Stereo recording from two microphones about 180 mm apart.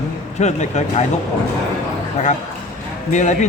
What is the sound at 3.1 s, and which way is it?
Speech, 40° left (ahead or behind).